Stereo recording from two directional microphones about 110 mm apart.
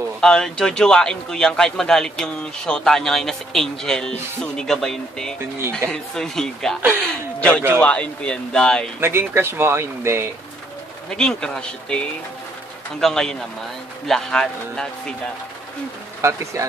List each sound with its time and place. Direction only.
0.2 s a man's voice: 5° left (ahead or behind)
9.0 s speech: 20° right (ahead or behind)
11.1 s a man's voice: 5° left (ahead or behind)
16.2 s speech: 25° right (ahead or behind)